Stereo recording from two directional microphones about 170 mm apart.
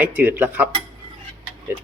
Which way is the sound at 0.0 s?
10° right (ahead or behind).